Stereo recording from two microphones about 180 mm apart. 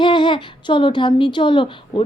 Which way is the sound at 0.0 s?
25° left (ahead or behind).